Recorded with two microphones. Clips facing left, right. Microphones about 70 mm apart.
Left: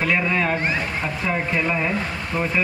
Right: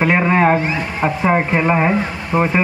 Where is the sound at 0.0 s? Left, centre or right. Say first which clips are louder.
Right 7 dB; right.